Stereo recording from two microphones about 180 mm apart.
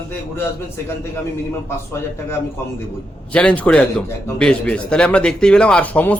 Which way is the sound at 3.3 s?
5° left (ahead or behind).